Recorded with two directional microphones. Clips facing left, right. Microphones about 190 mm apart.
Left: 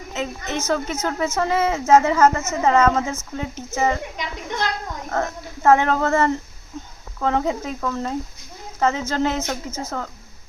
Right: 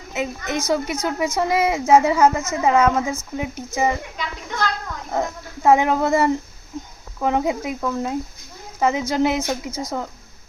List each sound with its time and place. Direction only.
0.1 s a woman's voice: 10° right (ahead or behind)
4.2 s a sound: 20° left (ahead or behind)
5.1 s a woman's voice: 15° right (ahead or behind)